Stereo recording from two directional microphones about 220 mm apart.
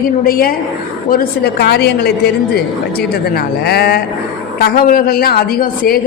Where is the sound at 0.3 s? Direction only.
40° left (ahead or behind).